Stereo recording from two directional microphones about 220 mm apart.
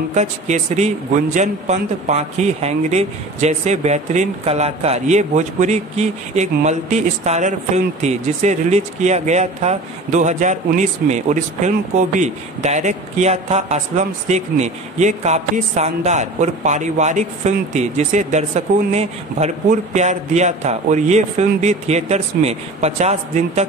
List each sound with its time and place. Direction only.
0.1 s a man's voice: 30° right (ahead or behind)